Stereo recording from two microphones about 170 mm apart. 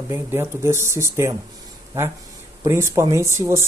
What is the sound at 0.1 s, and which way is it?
Speech, 15° right (ahead or behind).